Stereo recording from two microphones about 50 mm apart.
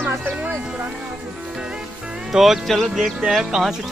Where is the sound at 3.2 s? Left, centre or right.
Centre.